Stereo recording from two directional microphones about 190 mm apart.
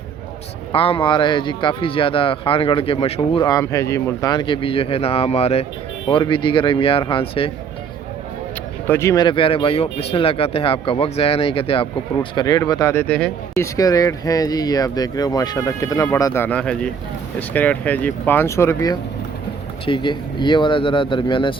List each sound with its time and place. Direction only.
0.7 s speech: 30° left (ahead or behind)
8.9 s speech: 15° left (ahead or behind)
13.7 s speech: 20° left (ahead or behind)